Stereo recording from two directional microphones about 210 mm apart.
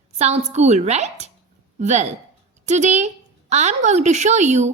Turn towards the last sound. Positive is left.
turn(degrees=-35)  # may be behind; listen again after turning